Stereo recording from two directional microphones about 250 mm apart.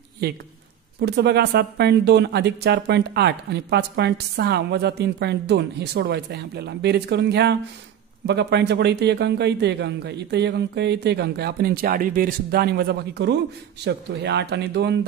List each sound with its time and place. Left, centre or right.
1.0 s speech: right